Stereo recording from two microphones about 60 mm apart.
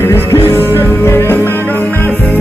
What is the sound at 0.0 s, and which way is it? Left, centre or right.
Music, left.